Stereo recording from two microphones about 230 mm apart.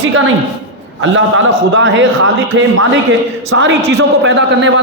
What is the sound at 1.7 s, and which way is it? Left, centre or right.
A man's voice, right.